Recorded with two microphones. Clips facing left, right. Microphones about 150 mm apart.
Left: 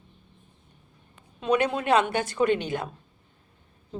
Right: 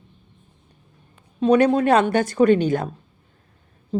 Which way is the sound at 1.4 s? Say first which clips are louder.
Right 8 dB; 40° right (ahead or behind).